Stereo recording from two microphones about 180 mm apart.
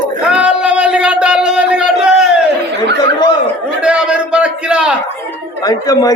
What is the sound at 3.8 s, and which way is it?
Speech, 5° right (ahead or behind).